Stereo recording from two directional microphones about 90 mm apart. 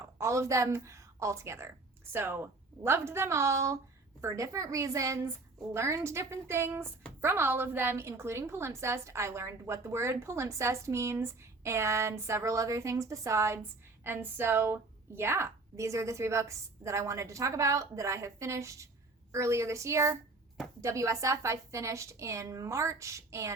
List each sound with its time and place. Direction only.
0.0 s a woman's voice: 35° right (ahead or behind)